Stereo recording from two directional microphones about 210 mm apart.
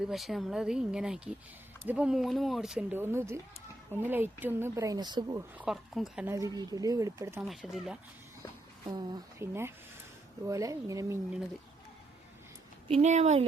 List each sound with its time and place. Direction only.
0.0 s speech: centre (ahead or behind); by 5.4 s 20° right (ahead or behind)
5.5 s speech: centre (ahead or behind)
6.3 s speech: 15° right (ahead or behind)
7.4 s speech: centre (ahead or behind)
8.8 s speech: 20° right (ahead or behind)
12.9 s speech: 30° right (ahead or behind)